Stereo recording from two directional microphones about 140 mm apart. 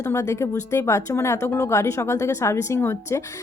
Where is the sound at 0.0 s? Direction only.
20° left (ahead or behind).